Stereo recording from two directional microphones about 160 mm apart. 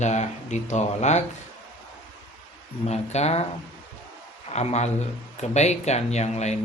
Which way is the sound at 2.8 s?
40° left (ahead or behind).